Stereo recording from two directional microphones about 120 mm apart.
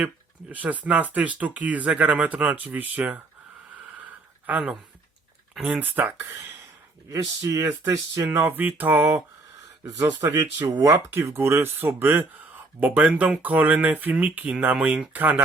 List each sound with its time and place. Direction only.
0.0 s speech: 10° right (ahead or behind)
4.4 s speech: 10° right (ahead or behind)
10.2 s speech: 30° right (ahead or behind)